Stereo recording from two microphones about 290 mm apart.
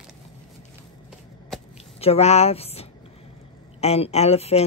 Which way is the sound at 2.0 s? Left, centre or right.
Left.